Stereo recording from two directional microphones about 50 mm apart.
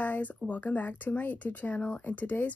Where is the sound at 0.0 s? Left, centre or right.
Left.